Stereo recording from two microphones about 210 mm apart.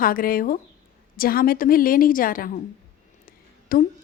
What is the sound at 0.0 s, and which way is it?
A woman's voice, 45° left (ahead or behind).